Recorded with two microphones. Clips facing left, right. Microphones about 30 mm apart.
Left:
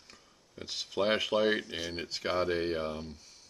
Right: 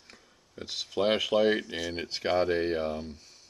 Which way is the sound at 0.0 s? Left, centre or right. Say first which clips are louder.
Right 2 dB; centre.